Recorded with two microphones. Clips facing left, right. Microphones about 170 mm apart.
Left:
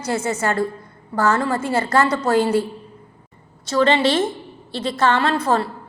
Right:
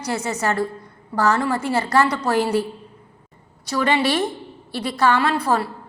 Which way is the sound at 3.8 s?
10° right (ahead or behind).